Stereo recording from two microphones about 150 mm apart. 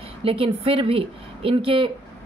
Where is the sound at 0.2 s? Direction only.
40° right (ahead or behind).